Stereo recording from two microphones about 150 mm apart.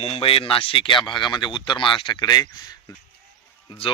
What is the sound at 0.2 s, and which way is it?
Speech, 35° left (ahead or behind).